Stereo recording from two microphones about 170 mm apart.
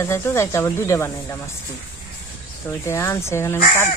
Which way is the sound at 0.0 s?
15° left (ahead or behind).